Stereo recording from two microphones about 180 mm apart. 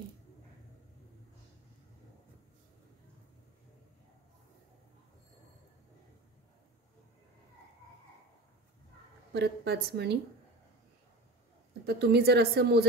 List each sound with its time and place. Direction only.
9.3 s a woman's voice: 70° right (ahead or behind)
11.8 s a woman's voice: 65° right (ahead or behind)